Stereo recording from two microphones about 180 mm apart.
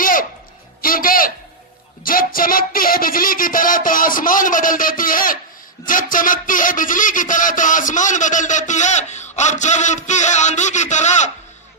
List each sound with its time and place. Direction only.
0.0 s music: 50° left (ahead or behind)
2.0 s a man's voice: 50° left (ahead or behind)